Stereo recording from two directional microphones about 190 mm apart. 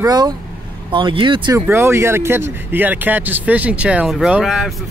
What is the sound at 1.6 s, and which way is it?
Speech, 15° right (ahead or behind).